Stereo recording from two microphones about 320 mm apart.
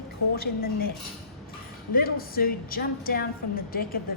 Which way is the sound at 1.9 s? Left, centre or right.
Left.